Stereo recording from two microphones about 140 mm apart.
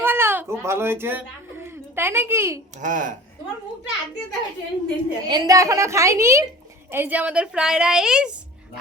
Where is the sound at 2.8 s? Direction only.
70° right (ahead or behind).